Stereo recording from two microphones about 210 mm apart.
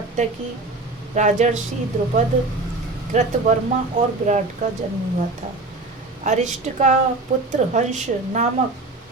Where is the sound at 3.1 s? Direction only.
35° right (ahead or behind).